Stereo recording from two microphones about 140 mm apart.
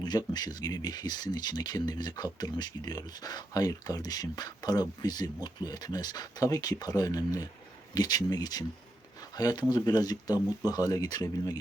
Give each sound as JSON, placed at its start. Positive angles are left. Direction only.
{"t": 0.0, "sound": "speech", "side_deg": 30}